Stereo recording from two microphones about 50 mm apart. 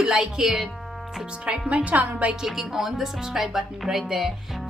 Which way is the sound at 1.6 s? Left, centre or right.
Right.